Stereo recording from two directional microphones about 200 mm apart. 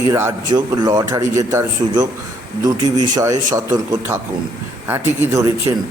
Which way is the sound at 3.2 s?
15° right (ahead or behind).